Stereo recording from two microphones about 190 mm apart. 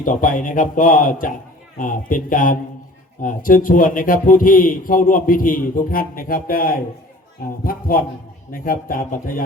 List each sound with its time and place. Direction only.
0.0 s a man's voice: 45° left (ahead or behind)